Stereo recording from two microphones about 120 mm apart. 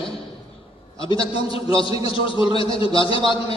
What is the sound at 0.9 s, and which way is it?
A man's voice, 45° left (ahead or behind).